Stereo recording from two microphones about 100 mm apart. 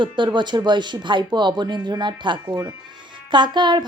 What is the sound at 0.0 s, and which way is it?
A woman's voice, 50° right (ahead or behind).